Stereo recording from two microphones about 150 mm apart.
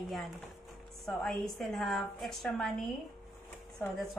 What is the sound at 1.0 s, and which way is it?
A woman's voice, 5° left (ahead or behind).